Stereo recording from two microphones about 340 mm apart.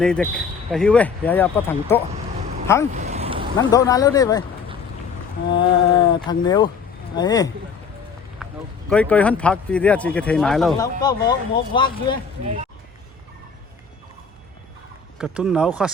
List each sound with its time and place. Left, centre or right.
0.0 s speech: centre
2.9 s a sound: centre
3.7 s speech: centre
5.5 s speech: centre
8.4 s a sound: centre
8.9 s speech: centre
11.0 s speech: centre
15.2 s speech: centre